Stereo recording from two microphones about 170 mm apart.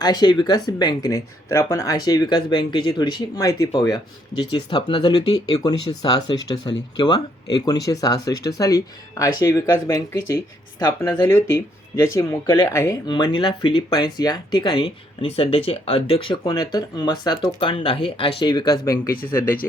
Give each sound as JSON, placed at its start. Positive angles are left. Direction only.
{"t": 0.0, "sound": "speech", "side_deg": 25}
{"t": 7.9, "sound": "speech", "side_deg": 20}